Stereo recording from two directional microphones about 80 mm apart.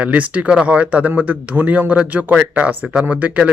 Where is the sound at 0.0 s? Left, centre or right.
Centre.